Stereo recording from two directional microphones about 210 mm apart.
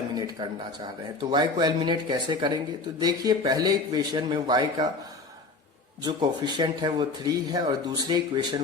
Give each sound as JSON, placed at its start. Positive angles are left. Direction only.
{"t": 0.1, "sound": "a sound", "side_deg": -20}
{"t": 1.2, "sound": "a man's voice", "side_deg": -20}
{"t": 6.0, "sound": "a man's voice", "side_deg": -20}